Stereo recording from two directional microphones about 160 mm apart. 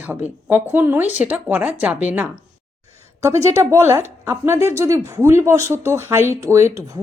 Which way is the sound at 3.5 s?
15° right (ahead or behind).